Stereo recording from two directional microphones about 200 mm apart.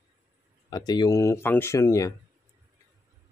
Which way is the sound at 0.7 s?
20° left (ahead or behind).